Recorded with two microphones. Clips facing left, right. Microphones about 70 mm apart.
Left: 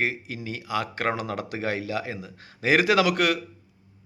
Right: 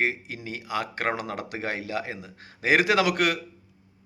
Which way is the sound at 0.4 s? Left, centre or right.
Right.